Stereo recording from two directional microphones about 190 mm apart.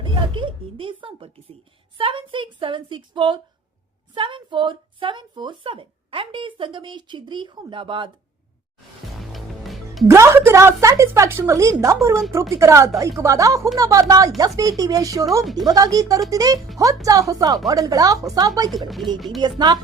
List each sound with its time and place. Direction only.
0.0 s a woman's voice: 25° right (ahead or behind)
9.3 s music: centre (ahead or behind)
10.1 s a woman's voice: 15° right (ahead or behind)
18.7 s speech: centre (ahead or behind)
19.4 s a woman's voice: 20° right (ahead or behind)